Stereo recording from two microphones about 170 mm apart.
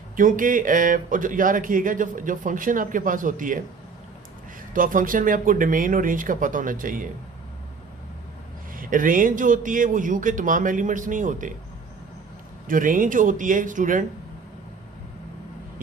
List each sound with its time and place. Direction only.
0.2 s speech: 50° right (ahead or behind)
4.7 s speech: 50° right (ahead or behind)
8.7 s speech: 55° right (ahead or behind)
12.6 s speech: 50° right (ahead or behind)